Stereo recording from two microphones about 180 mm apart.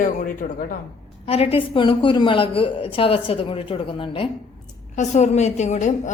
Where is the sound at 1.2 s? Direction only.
30° left (ahead or behind).